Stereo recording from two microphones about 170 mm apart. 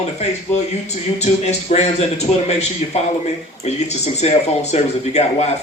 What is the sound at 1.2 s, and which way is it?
A man's voice, 40° left (ahead or behind).